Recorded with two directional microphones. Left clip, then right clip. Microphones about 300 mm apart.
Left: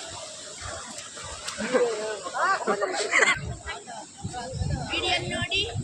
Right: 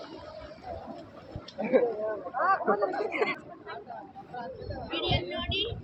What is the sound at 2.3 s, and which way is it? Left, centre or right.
Speech, left.